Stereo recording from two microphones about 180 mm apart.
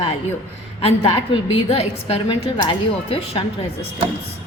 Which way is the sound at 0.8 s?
30° left (ahead or behind).